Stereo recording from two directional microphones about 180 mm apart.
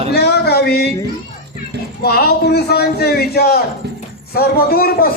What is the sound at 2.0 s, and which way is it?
A man's voice, 60° left (ahead or behind).